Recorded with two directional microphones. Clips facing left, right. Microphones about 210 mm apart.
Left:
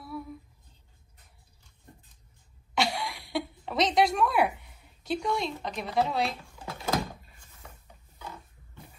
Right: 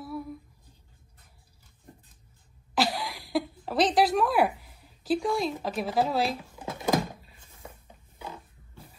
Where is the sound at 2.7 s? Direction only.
Centre (ahead or behind).